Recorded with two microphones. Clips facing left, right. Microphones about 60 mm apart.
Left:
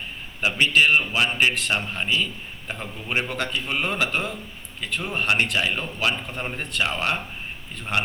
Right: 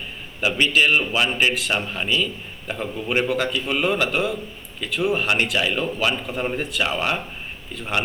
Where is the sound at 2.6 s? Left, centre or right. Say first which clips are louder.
Right 6 dB; centre.